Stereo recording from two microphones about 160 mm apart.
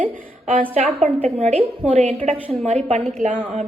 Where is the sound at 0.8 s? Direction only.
45° right (ahead or behind).